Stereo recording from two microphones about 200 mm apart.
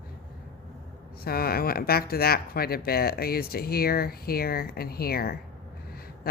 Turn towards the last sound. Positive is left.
turn(degrees=50)  # may be behind; listen again after turning